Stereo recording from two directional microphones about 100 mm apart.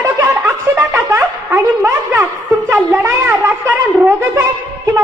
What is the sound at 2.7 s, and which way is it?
Wind instrument, 25° right (ahead or behind).